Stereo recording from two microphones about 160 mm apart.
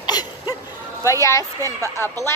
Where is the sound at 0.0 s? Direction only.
25° left (ahead or behind).